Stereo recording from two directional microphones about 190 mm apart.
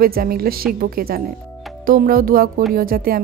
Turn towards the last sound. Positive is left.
turn(degrees=-50)  # may be behind; listen again after turning